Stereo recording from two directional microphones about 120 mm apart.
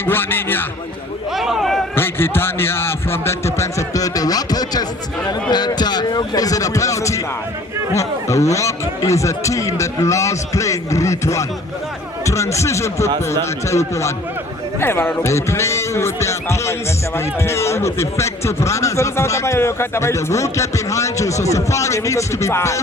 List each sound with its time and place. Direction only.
0.0 s a man's voice: 20° left (ahead or behind)
1.4 s a man's voice: centre (ahead or behind)
2.0 s a man's voice: 20° left (ahead or behind)